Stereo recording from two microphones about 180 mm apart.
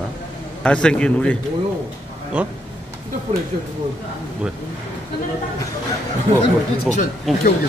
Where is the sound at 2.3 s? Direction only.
5° right (ahead or behind).